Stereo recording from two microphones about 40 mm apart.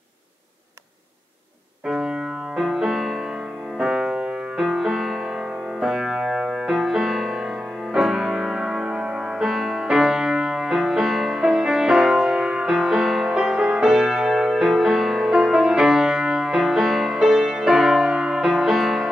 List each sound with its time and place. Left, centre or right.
1.9 s music: centre
4.7 s music: centre
12.8 s music: centre